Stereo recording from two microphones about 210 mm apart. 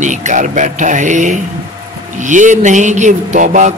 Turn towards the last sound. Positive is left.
turn(degrees=-35)  # may be behind; listen again after turning